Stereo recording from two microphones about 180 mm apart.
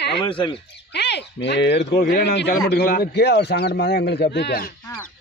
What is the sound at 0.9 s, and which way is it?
Speech, 70° left (ahead or behind).